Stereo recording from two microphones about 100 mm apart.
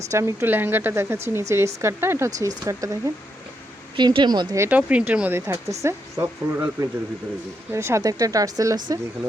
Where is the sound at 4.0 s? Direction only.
50° right (ahead or behind).